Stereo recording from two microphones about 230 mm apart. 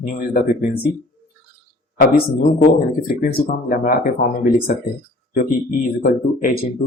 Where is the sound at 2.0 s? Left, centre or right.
Left.